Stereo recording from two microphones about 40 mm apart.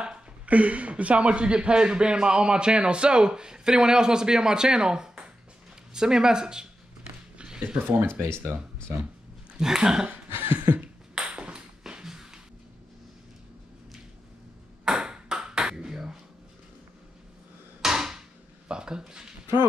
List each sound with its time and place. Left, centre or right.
0.5 s speech: right; by 6.7 s centre
7.3 s a sound: right
8.2 s speech: right
9.6 s speech: centre
10.0 s speech: right
11.1 s ping: right
11.9 s music: centre
14.9 s ping: centre
17.8 s hammer: centre
18.7 s a sound: centre